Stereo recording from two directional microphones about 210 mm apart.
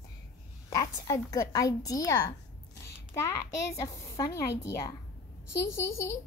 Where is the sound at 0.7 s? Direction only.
15° left (ahead or behind).